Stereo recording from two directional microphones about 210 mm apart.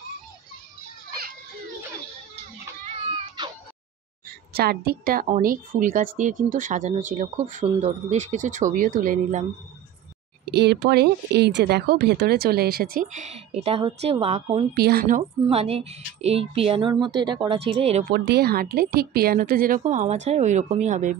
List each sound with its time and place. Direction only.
3.4 s meow: 20° right (ahead or behind)
4.6 s a woman's voice: 45° right (ahead or behind)
10.4 s speech: 50° right (ahead or behind); by 14.8 s 30° right (ahead or behind)
14.8 s speech: 45° right (ahead or behind)
15.4 s a woman's voice: 30° right (ahead or behind)
18.1 s speech: 50° right (ahead or behind)